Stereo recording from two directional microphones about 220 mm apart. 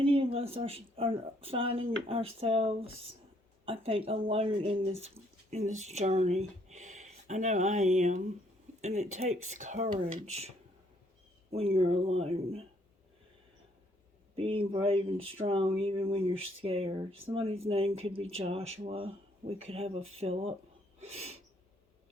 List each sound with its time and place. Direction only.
0.0 s speech: 25° right (ahead or behind)
11.5 s speech: 25° right (ahead or behind)
14.3 s speech: 25° right (ahead or behind)
21.0 s sneeze: 30° right (ahead or behind)